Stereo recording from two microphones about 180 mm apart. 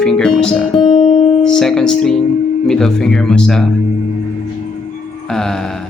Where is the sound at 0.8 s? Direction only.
25° left (ahead or behind).